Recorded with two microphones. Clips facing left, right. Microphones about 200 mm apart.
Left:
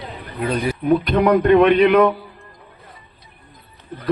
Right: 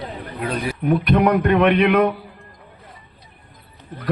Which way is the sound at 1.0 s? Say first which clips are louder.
Right 1 dB; 60° right (ahead or behind).